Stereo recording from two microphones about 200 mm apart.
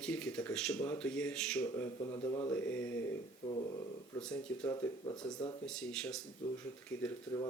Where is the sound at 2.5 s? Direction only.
10° left (ahead or behind).